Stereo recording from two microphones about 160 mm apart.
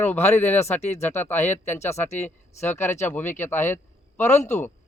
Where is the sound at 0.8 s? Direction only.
40° left (ahead or behind).